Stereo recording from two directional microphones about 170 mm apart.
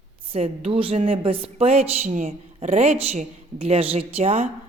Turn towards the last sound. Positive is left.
turn(degrees=-40)  # may be behind; listen again after turning